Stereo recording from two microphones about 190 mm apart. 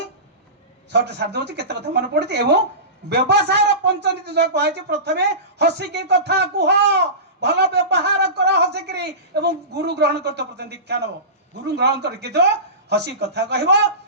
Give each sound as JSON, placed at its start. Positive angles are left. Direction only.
{"t": 0.9, "sound": "a man's voice", "side_deg": -60}